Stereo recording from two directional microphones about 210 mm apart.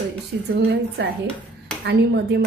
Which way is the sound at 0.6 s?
50° right (ahead or behind).